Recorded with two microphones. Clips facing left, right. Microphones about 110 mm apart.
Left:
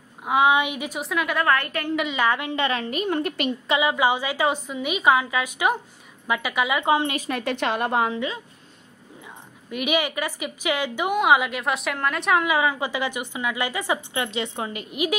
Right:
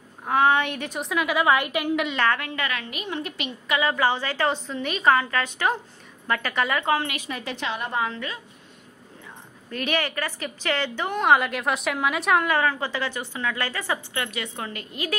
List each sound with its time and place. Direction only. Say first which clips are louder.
0.2 s a woman's voice: left 1 dB; 10° left (ahead or behind); by 2.0 s 15° right (ahead or behind)
2.1 s a woman's voice: left 1 dB; 15° left (ahead or behind); by 3.5 s 50° left (ahead or behind)
3.8 s a woman's voice: even; 15° left (ahead or behind)
7.2 s a woman's voice: left 5 dB; 55° left (ahead or behind)
8.0 s a woman's voice: left 4 dB; 15° left (ahead or behind)
9.7 s a woman's voice: left 2 dB; 15° left (ahead or behind)